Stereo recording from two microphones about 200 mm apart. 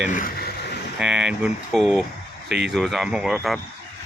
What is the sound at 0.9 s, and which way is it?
Speech, 5° right (ahead or behind).